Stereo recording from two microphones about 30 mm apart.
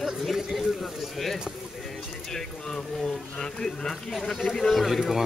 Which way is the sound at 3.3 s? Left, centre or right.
Left.